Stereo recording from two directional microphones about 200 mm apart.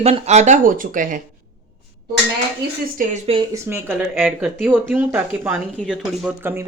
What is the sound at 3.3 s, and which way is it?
Speech, 15° right (ahead or behind).